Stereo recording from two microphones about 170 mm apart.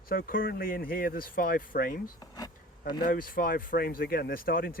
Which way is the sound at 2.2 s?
25° left (ahead or behind).